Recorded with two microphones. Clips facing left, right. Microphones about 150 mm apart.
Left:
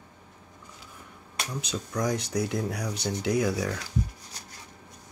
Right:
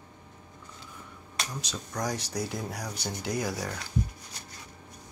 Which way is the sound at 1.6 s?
60° left (ahead or behind).